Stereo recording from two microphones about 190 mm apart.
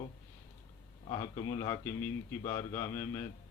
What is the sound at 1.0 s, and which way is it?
Speech, 20° left (ahead or behind).